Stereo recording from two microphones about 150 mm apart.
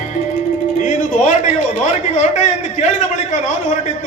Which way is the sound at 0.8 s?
55° left (ahead or behind).